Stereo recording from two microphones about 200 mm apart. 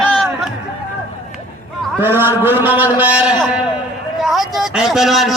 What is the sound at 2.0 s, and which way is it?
A man's voice, 10° right (ahead or behind).